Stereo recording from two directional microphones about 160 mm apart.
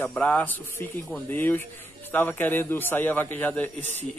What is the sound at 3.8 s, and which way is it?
Speech, 45° right (ahead or behind).